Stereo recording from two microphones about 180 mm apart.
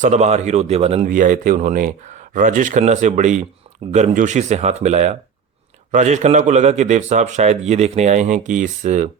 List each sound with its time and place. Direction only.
0.0 s speech: 40° right (ahead or behind)
1.0 s speech: 50° right (ahead or behind)